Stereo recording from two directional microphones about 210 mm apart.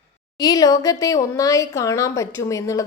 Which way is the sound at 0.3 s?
20° left (ahead or behind).